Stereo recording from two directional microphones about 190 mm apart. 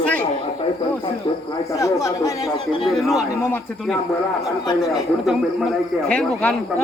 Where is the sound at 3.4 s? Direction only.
10° left (ahead or behind).